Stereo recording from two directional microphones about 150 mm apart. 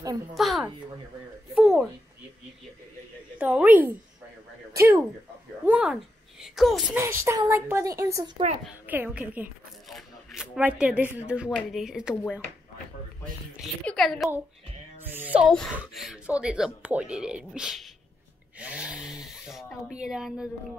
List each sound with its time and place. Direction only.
0.3 s speech: centre (ahead or behind)
3.3 s a woman's voice: 10° right (ahead or behind)
5.7 s a woman's voice: 10° right (ahead or behind)
7.0 s a woman's voice: 15° right (ahead or behind)
9.8 s shuffling cards: centre (ahead or behind)
11.2 s speech: 5° right (ahead or behind)
13.8 s speech: centre (ahead or behind)
15.0 s speech: 15° right (ahead or behind)